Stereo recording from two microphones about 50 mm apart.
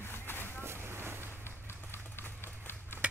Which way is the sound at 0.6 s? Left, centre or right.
Right.